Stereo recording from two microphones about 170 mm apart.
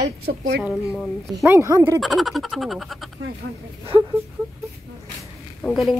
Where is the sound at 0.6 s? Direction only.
10° right (ahead or behind).